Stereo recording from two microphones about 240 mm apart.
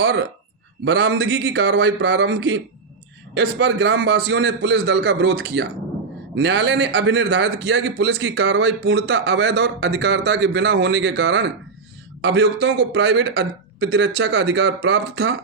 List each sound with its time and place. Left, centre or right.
0.0 s a man's voice: right